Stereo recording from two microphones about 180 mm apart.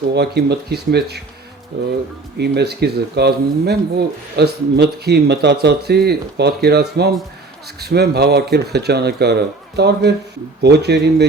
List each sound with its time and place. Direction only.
0.1 s speech: 65° right (ahead or behind)
2.4 s speech: 65° right (ahead or behind)